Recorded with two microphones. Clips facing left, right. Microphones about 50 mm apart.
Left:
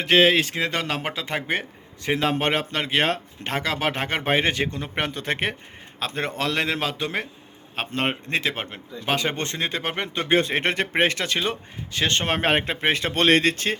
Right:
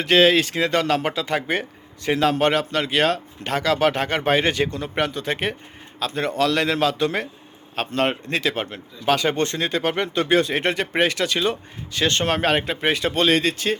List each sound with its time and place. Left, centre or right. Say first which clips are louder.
0.0 s speech: right 2 dB; centre; by 13.7 s left